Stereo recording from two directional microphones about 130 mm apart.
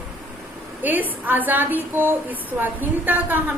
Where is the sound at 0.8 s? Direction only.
15° right (ahead or behind).